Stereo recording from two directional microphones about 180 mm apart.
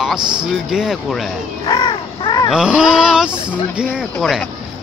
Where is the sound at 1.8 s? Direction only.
30° left (ahead or behind).